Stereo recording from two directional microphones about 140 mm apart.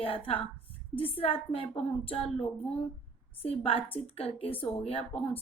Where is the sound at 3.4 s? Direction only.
40° left (ahead or behind).